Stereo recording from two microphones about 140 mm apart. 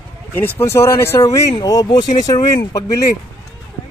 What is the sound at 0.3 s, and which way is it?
Speech, 15° left (ahead or behind).